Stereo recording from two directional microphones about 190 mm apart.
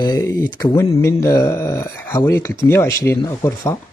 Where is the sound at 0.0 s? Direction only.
20° left (ahead or behind).